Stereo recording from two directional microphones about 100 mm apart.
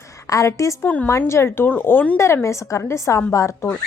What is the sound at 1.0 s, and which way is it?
Speech, 25° left (ahead or behind).